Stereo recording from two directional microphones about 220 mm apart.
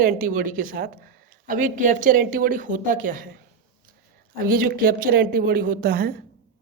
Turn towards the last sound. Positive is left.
turn(degrees=-45)  # may be behind; listen again after turning